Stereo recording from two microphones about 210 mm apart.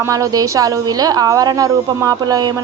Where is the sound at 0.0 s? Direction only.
15° right (ahead or behind).